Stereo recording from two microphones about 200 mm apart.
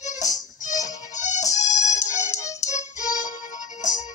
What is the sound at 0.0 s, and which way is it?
Music, 35° left (ahead or behind).